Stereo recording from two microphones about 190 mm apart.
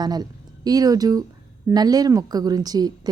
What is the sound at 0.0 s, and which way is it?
A woman's voice, 20° right (ahead or behind).